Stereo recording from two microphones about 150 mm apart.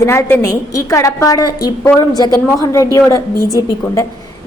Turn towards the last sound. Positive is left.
turn(degrees=25)  # may be behind; listen again after turning